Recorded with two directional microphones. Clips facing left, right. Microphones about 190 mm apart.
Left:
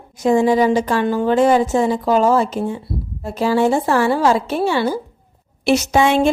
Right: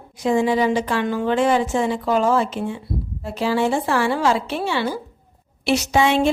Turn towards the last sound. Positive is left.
turn(degrees=45)  # may be behind; listen again after turning